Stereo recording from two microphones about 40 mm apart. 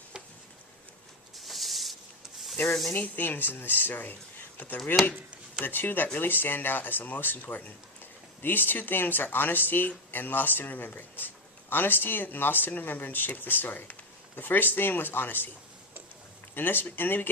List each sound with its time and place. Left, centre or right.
1.4 s a sound: centre
3.2 s speech: left
16.6 s speech: left